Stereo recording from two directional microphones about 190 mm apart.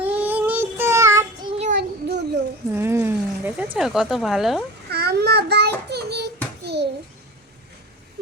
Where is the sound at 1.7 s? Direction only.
60° right (ahead or behind).